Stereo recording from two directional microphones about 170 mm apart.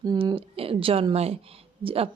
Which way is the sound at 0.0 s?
25° right (ahead or behind).